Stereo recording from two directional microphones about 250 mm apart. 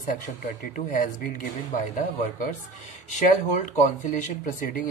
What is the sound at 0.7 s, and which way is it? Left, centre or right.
Speech, left.